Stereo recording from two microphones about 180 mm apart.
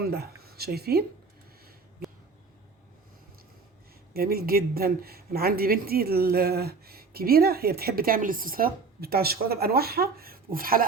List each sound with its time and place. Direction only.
0.0 s speech: 60° right (ahead or behind)
4.1 s speech: 55° right (ahead or behind)